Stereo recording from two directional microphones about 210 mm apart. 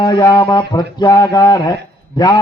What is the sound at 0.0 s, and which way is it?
A man's voice, 20° left (ahead or behind).